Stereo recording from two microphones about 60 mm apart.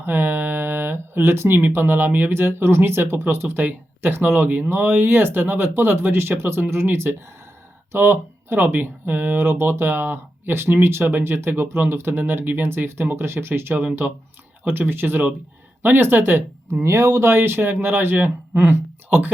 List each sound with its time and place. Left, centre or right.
0.0 s speech: right
16.8 s speech: right
17.2 s speech: right